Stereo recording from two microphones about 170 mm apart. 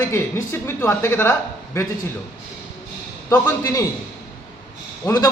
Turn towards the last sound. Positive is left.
turn(degrees=20)  # may be behind; listen again after turning